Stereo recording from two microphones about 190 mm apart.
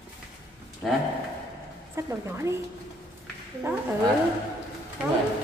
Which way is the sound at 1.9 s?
15° right (ahead or behind).